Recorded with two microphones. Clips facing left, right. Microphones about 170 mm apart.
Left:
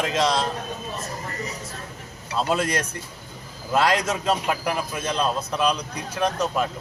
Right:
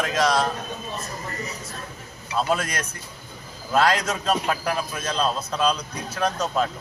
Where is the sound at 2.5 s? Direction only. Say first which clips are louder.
Left 2 dB; 25° left (ahead or behind).